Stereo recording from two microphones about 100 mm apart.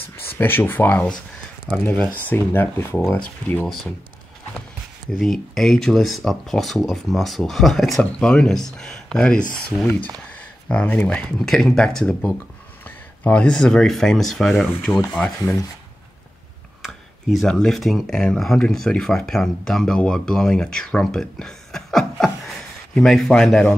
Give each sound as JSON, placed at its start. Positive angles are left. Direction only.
{"t": 0.3, "sound": "speech", "side_deg": 20}
{"t": 3.6, "sound": "speech", "side_deg": 5}
{"t": 5.2, "sound": "speech", "side_deg": 5}
{"t": 17.4, "sound": "speech", "side_deg": 5}